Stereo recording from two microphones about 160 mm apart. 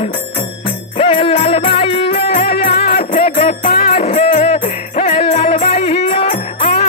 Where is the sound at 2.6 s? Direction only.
75° left (ahead or behind); by 3.4 s 55° left (ahead or behind).